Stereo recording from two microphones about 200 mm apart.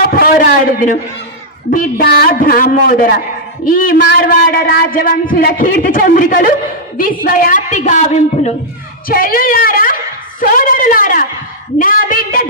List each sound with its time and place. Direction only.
0.0 s a man's voice: 50° left (ahead or behind)
9.1 s a man's voice: 45° left (ahead or behind)